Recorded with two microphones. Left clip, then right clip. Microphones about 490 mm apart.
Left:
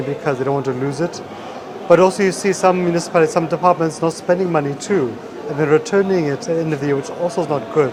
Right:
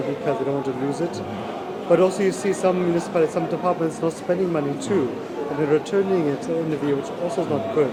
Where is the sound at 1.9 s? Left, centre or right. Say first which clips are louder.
Left 6 dB; left.